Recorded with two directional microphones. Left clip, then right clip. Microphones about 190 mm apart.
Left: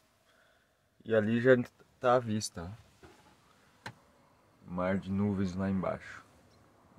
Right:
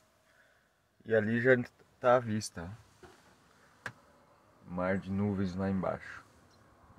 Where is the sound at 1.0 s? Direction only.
30° left (ahead or behind).